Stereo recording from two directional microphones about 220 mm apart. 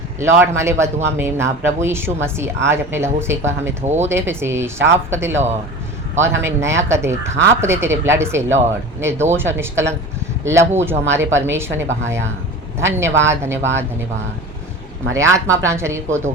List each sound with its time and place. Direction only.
0.2 s a woman's voice: 10° right (ahead or behind)
3.8 s speech: 30° right (ahead or behind)
4.1 s a woman's voice: 10° right (ahead or behind)
15.1 s a woman's voice: 15° right (ahead or behind)